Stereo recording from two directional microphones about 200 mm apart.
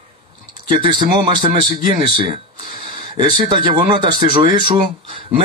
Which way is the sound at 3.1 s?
20° right (ahead or behind).